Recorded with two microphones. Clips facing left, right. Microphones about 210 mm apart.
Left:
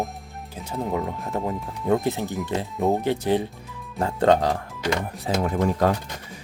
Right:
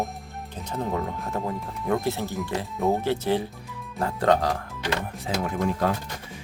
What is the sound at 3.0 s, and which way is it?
Speech, 15° left (ahead or behind).